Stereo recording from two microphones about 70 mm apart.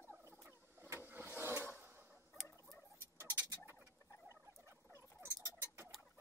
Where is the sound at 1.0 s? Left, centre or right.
Right.